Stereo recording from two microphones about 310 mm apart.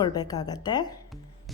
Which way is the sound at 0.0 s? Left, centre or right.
Centre.